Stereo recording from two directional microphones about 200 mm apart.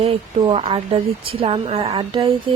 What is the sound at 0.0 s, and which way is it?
Speech, 25° right (ahead or behind).